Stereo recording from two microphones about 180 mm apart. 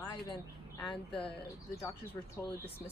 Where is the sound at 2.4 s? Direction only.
20° left (ahead or behind).